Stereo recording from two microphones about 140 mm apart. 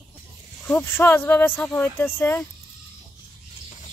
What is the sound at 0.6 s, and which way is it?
Speech, 15° left (ahead or behind).